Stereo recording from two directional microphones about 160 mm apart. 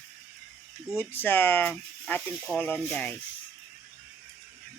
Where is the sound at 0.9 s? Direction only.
15° left (ahead or behind).